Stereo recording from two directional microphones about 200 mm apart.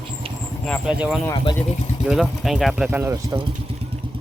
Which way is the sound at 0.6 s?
Centre (ahead or behind).